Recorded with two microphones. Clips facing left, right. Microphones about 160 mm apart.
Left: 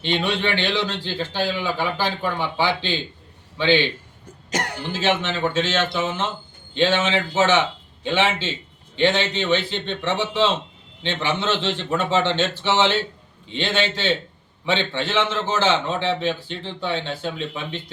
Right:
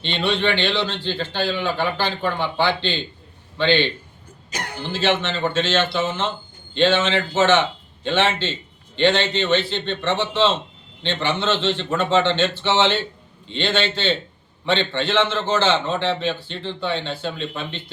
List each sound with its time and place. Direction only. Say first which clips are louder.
0.0 s a man's voice: right 1 dB; 10° left (ahead or behind)
4.5 s speech: left 5 dB; 80° left
4.9 s a man's voice: right 1 dB; 10° left (ahead or behind)